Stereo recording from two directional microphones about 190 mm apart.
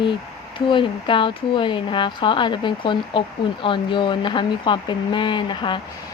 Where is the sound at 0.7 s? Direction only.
25° left (ahead or behind).